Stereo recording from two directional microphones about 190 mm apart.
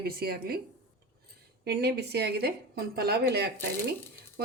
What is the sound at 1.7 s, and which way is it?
A woman's voice, 60° right (ahead or behind).